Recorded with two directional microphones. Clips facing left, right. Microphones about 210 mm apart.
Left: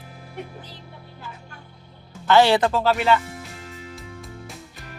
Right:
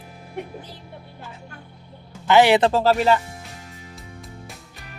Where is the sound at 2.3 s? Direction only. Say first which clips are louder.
Right 1 dB; 15° right (ahead or behind).